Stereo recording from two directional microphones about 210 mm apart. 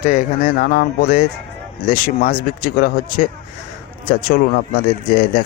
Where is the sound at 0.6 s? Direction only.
45° left (ahead or behind).